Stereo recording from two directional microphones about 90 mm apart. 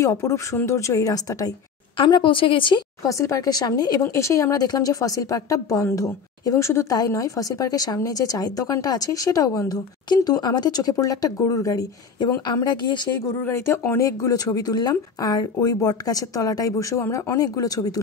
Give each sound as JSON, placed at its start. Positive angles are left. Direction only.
{"t": 0.0, "sound": "a woman's voice", "side_deg": 35}
{"t": 2.0, "sound": "a woman's voice", "side_deg": 60}
{"t": 3.0, "sound": "speech", "side_deg": 35}
{"t": 4.0, "sound": "a woman's voice", "side_deg": 35}
{"t": 13.4, "sound": "speech", "side_deg": 25}